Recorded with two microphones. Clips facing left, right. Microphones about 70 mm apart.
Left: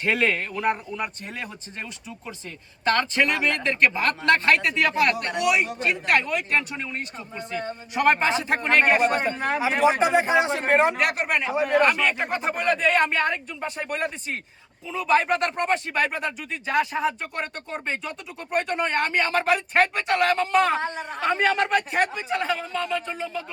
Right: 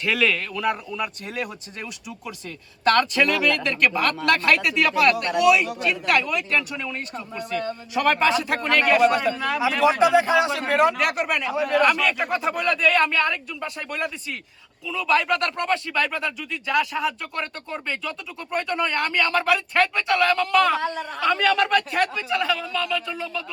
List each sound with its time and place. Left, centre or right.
0.0 s speech: left
2.9 s speech: left
7.5 s a man's voice: centre
11.0 s speech: left